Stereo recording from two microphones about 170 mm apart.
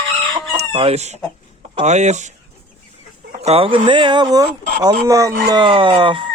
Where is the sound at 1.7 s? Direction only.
40° right (ahead or behind).